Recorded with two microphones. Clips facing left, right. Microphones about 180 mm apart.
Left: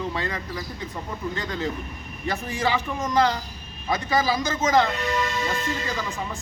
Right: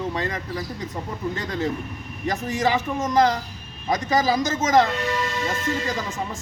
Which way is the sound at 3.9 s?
40° right (ahead or behind).